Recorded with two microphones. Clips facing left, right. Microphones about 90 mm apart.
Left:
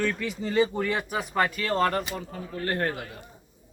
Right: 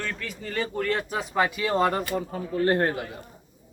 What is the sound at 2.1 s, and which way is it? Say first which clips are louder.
Speech: right 7 dB; 30° right (ahead or behind).